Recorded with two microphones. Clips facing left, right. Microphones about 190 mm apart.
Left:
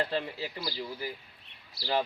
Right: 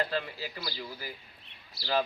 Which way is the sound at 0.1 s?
25° left (ahead or behind).